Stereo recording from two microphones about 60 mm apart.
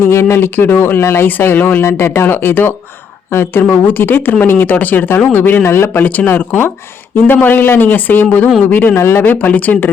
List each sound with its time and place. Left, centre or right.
0.0 s speech: left
1.5 s speech: left
1.8 s speech: left
5.6 s speech: left
6.0 s speech: left
9.0 s speech: left
9.2 s speech: left